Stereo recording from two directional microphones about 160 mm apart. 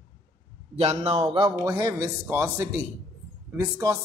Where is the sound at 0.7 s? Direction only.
40° right (ahead or behind).